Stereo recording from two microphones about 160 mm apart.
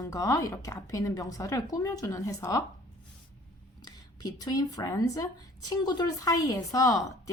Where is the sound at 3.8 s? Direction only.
25° left (ahead or behind).